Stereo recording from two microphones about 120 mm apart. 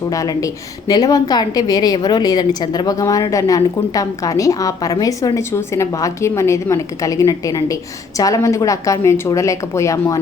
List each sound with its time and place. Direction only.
0.1 s a woman's voice: 30° left (ahead or behind)